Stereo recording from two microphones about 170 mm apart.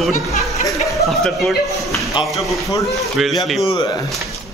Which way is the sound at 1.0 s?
Centre (ahead or behind).